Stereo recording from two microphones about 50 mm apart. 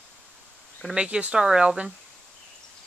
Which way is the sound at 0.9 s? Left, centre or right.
Right.